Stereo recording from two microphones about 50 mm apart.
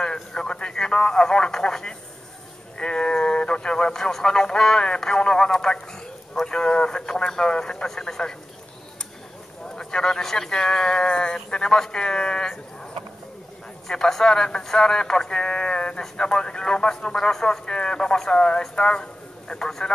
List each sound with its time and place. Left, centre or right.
0.0 s a man's voice: centre
9.8 s a man's voice: centre
13.8 s a man's voice: centre